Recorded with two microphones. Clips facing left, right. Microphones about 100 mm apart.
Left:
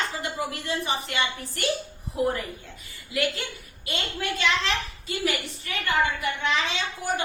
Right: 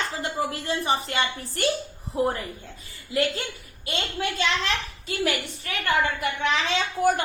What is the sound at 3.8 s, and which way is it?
Speech, 30° right (ahead or behind).